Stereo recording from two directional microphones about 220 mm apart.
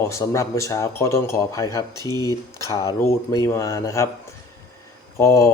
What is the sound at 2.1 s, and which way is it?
Speech, 20° right (ahead or behind).